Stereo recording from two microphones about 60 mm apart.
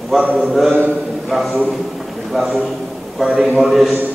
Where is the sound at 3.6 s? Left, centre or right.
Centre.